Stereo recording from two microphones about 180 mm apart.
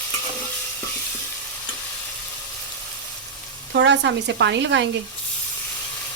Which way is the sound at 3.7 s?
80° right.